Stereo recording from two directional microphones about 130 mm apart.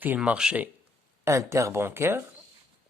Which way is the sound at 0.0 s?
10° right (ahead or behind).